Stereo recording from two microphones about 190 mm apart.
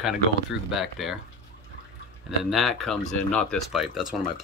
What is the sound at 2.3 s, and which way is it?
Speech, centre (ahead or behind).